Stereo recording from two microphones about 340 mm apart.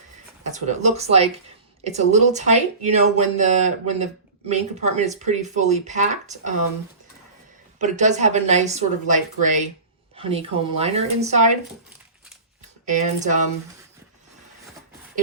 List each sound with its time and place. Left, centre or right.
0.4 s speech: right
7.8 s a woman's voice: right
12.8 s speech: right